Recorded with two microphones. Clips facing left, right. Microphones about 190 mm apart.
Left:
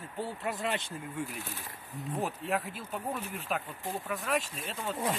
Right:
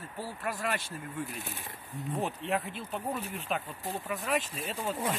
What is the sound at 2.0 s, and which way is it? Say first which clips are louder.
Speech: right 1 dB; centre (ahead or behind).